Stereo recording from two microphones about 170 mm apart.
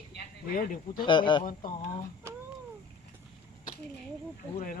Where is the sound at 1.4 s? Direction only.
50° left (ahead or behind).